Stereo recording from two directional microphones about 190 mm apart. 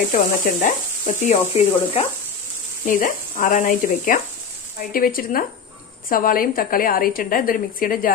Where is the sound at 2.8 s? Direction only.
45° left (ahead or behind).